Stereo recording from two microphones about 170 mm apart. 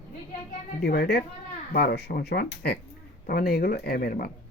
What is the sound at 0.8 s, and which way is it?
Speech, 70° left (ahead or behind).